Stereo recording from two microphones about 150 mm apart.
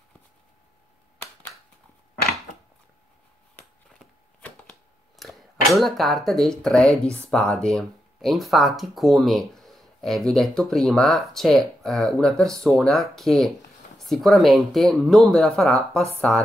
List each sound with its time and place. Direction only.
4.0 s speech: 5° left (ahead or behind)